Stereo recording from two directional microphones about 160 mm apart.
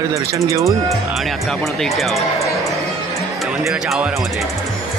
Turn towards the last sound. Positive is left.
turn(degrees=-5)  # may be behind; listen again after turning